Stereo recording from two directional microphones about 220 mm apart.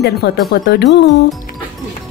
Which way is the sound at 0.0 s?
45° left (ahead or behind).